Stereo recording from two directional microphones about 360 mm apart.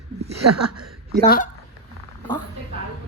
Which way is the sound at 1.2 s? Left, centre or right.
Left.